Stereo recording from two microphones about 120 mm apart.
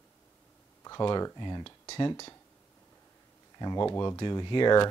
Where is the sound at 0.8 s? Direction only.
35° left (ahead or behind).